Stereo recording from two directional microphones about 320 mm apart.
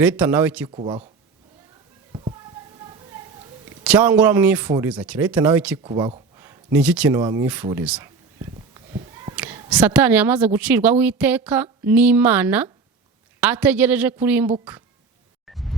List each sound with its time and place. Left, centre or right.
0.0 s a woman's voice: centre
0.7 s speech: centre
3.8 s a woman's voice: centre
9.2 s a woman's voice: centre
15.4 s music: centre